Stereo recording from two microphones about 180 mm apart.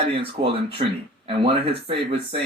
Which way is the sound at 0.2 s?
30° right (ahead or behind).